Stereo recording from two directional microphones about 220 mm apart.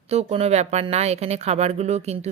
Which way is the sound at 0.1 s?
30° right (ahead or behind).